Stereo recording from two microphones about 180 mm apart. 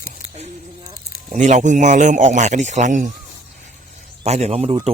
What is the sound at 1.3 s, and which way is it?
A man's voice, 40° right (ahead or behind).